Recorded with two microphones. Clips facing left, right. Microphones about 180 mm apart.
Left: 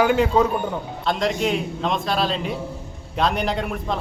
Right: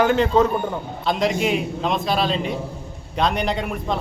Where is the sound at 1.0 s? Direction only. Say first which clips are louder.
Right 1 dB; centre (ahead or behind).